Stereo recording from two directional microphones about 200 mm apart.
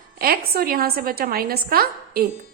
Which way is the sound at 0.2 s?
50° right (ahead or behind).